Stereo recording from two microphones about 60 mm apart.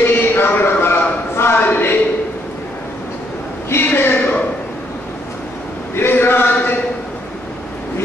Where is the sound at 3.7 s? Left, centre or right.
Left.